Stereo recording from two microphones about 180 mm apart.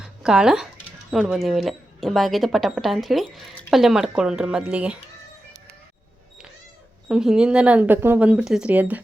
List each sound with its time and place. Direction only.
0.0 s speech: 5° right (ahead or behind)
7.1 s speech: 5° right (ahead or behind)